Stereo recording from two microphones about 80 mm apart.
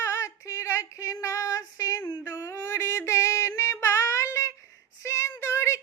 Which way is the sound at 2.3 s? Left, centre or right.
Left.